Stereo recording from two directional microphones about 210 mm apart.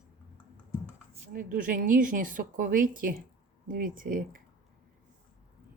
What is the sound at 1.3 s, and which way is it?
A woman's voice, 40° right (ahead or behind).